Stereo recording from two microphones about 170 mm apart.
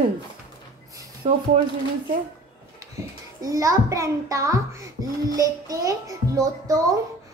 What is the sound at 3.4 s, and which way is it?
A child's voice, 20° right (ahead or behind).